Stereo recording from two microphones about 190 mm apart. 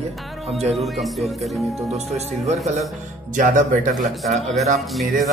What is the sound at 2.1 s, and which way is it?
Speech, 35° right (ahead or behind).